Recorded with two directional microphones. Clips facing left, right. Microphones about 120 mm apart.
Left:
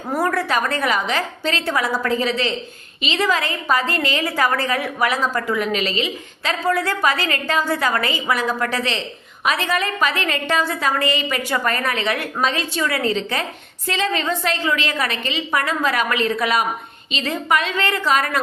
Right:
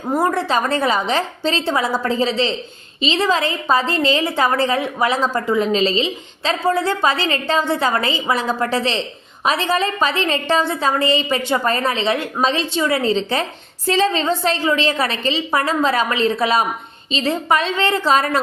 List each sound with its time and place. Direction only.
0.1 s a woman's voice: 25° right (ahead or behind)